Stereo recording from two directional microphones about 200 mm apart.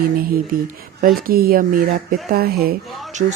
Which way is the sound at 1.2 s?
45° right (ahead or behind).